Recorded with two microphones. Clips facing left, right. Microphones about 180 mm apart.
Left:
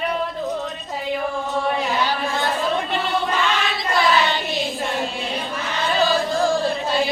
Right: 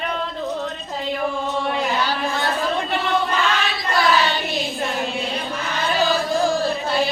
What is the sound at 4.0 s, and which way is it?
Child singing, 20° left (ahead or behind).